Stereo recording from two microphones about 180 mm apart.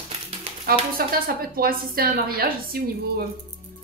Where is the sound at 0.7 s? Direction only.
55° right (ahead or behind).